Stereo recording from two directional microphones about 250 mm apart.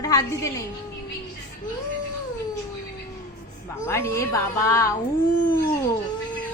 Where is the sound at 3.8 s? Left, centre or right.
Centre.